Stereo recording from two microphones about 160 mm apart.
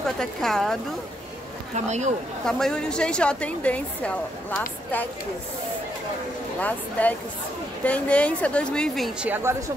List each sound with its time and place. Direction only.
0.0 s speech: centre (ahead or behind)
1.9 s speech: 45° right (ahead or behind)
2.4 s a woman's voice: 5° left (ahead or behind)
6.6 s a woman's voice: 10° left (ahead or behind)
9.3 s a woman's voice: 15° right (ahead or behind)